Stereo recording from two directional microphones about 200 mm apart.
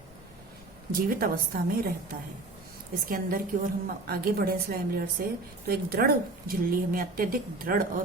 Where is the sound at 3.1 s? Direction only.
45° right (ahead or behind).